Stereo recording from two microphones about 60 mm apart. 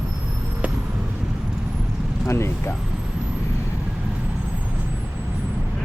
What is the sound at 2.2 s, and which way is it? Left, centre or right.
Speech, left.